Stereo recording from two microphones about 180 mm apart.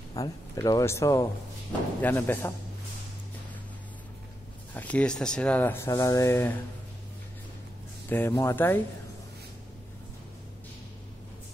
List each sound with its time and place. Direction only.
0.1 s speech: 20° left (ahead or behind)
4.7 s speech: 10° left (ahead or behind)
8.1 s speech: 15° left (ahead or behind)